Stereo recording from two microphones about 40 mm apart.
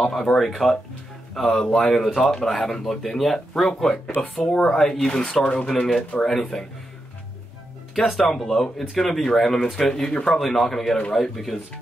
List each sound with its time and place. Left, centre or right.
0.1 s speech: centre
4.2 s speech: left
5.7 s speech: centre
7.9 s speech: centre